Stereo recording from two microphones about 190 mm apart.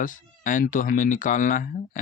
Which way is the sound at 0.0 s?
45° left (ahead or behind).